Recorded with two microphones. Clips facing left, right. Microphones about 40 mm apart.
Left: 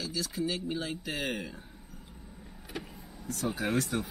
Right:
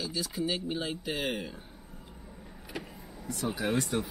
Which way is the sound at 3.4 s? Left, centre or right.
Centre.